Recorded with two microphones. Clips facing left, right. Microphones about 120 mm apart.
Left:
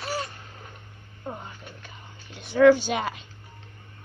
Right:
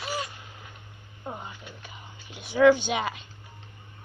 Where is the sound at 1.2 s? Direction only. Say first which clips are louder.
Left 1 dB; 10° right (ahead or behind).